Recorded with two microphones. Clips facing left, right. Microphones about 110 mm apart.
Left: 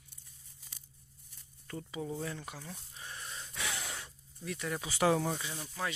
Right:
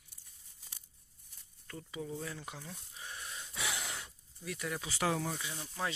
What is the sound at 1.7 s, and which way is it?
Speech, 5° left (ahead or behind).